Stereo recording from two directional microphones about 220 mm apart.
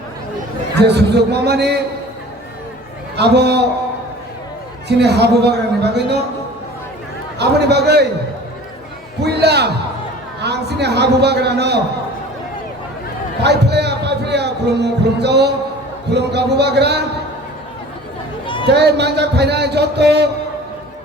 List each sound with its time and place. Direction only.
0.8 s a man's voice: 50° right (ahead or behind)
3.2 s a man's voice: 50° right (ahead or behind)
4.9 s a man's voice: 50° right (ahead or behind)
7.3 s a man's voice: 50° right (ahead or behind)
9.2 s a man's voice: 50° right (ahead or behind)
13.4 s a man's voice: 50° right (ahead or behind)
18.4 s a sound: 25° left (ahead or behind)
18.7 s a man's voice: 50° right (ahead or behind)